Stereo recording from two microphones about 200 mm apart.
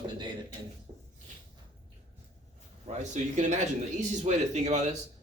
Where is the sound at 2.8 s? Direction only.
35° right (ahead or behind).